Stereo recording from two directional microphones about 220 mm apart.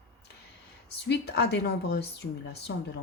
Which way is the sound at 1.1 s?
50° left (ahead or behind).